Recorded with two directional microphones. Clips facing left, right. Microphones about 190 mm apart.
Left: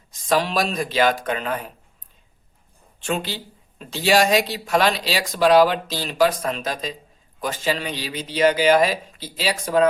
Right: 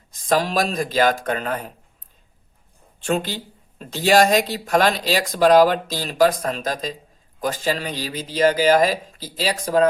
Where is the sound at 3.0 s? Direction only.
45° right (ahead or behind).